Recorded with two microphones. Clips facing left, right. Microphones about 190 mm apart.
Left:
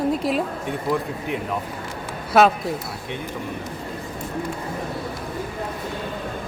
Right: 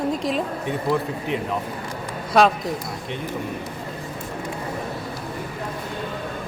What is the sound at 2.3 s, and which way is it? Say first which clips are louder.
Speech: left 1 dB; 5° left (ahead or behind).